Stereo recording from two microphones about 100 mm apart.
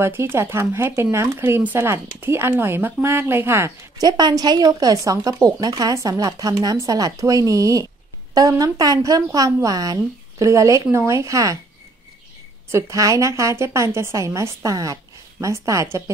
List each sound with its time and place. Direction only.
0.0 s speech: 25° right (ahead or behind)
4.0 s speech: 40° right (ahead or behind)
12.7 s speech: 35° right (ahead or behind)